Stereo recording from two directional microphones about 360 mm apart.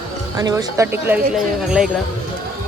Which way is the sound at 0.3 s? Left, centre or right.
Centre.